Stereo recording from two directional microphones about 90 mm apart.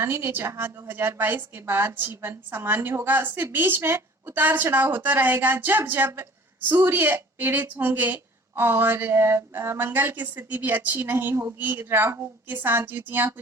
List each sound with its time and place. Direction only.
0.0 s a woman's voice: 25° right (ahead or behind)